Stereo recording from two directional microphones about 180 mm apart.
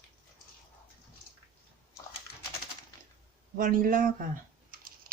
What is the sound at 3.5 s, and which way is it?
Speech, 50° right (ahead or behind).